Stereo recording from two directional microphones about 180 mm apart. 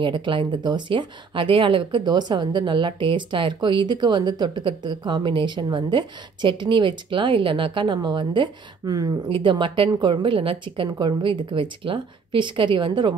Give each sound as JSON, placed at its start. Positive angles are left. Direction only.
{"t": 0.0, "sound": "speech", "side_deg": -25}